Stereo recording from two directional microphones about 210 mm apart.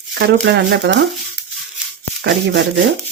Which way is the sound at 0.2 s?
55° right (ahead or behind).